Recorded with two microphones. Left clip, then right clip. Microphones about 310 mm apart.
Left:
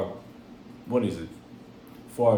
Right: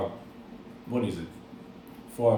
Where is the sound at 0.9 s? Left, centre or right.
Left.